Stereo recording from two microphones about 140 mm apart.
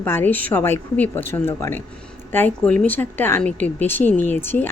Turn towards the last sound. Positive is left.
turn(degrees=15)  # may be behind; listen again after turning